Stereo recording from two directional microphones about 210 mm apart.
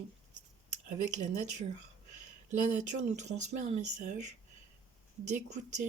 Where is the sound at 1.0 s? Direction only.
35° right (ahead or behind).